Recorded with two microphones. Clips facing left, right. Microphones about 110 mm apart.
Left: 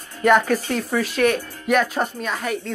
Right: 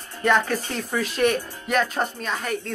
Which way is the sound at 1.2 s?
5° left (ahead or behind).